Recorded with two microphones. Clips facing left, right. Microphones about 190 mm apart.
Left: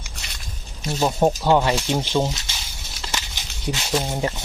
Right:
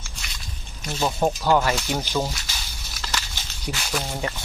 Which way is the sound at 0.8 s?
25° left (ahead or behind).